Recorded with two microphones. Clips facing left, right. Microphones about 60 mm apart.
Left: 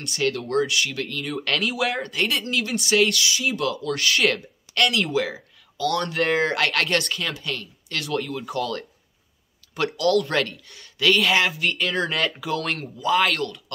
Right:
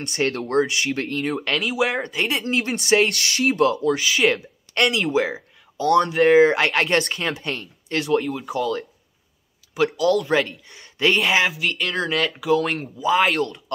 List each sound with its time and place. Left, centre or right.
0.1 s speech: right
1.4 s speech: centre
2.4 s speech: right
3.9 s speech: centre
5.1 s a sound: right
5.9 s speech: centre
8.2 s speech: centre
10.7 s speech: right
11.1 s speech: centre